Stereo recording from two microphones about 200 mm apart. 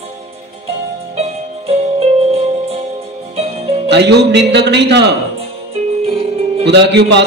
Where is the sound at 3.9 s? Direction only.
60° right (ahead or behind).